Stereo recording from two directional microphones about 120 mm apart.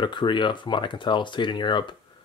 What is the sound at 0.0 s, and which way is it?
Speech, 40° left (ahead or behind).